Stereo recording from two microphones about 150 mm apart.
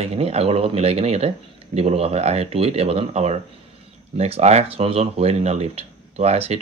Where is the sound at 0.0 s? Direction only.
45° right (ahead or behind).